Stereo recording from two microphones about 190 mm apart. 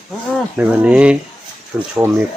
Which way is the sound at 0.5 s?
10° right (ahead or behind).